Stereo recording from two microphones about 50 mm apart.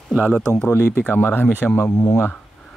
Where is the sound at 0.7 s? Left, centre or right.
Left.